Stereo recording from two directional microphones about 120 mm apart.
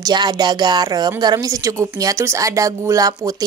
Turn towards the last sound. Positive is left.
turn(degrees=-30)  # may be behind; listen again after turning